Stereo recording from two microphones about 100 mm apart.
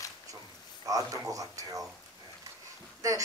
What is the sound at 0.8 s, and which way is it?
Speech, 35° right (ahead or behind).